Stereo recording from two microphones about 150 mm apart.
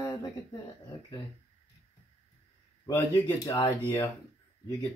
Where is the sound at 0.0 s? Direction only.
20° left (ahead or behind).